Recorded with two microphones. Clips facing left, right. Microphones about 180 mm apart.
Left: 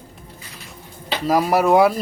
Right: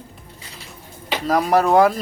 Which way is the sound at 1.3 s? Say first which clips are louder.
Left 1 dB; 5° left (ahead or behind).